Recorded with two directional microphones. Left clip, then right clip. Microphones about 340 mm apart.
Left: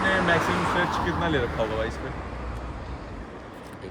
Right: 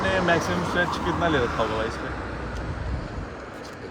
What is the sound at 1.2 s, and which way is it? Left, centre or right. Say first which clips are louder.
Speech: right 6 dB; centre.